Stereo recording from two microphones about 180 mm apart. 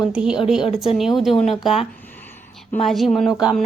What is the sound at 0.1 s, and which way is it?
Speech, 5° right (ahead or behind).